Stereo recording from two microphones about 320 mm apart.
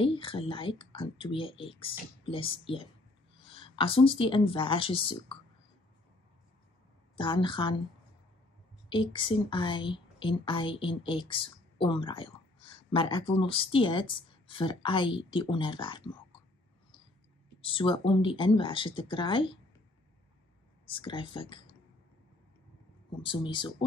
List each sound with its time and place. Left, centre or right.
0.0 s speech: centre
7.2 s speech: centre
8.8 s speech: centre
17.6 s speech: centre
20.8 s speech: centre
23.2 s speech: centre